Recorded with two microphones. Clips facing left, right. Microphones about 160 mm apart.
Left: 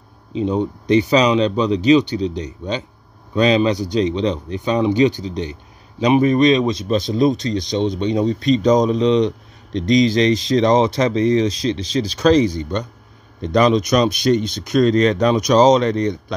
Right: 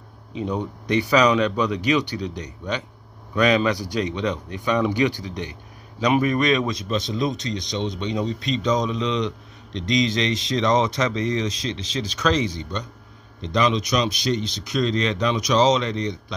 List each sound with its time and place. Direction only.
0.3 s a man's voice: 25° left (ahead or behind); by 16.3 s 50° left (ahead or behind)